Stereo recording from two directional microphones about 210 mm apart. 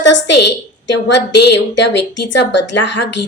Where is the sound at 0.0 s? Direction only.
55° left (ahead or behind).